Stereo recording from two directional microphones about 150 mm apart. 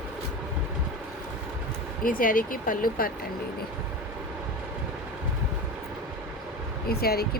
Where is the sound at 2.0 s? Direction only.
70° left (ahead or behind).